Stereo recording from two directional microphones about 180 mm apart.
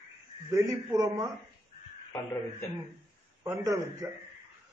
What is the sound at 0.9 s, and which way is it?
Speech, 20° right (ahead or behind).